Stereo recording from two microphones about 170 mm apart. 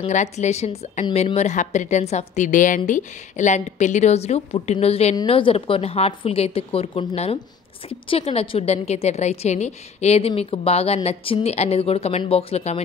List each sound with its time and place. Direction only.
0.0 s a woman's voice: 45° left (ahead or behind)